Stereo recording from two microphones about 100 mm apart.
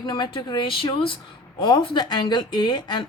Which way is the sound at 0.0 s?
50° left (ahead or behind).